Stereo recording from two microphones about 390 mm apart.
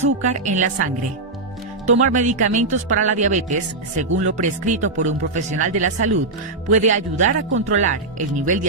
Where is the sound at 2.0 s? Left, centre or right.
Centre.